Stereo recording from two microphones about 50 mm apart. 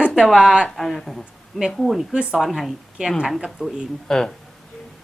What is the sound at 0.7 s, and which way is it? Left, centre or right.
Speech, centre.